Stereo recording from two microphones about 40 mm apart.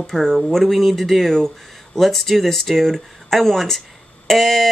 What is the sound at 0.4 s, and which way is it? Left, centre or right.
Speech, centre.